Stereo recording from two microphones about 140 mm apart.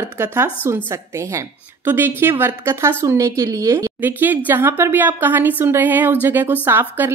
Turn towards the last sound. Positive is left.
turn(degrees=-15)  # may be behind; listen again after turning